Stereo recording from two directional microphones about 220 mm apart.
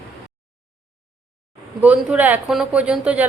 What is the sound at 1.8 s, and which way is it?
Speech, 5° right (ahead or behind).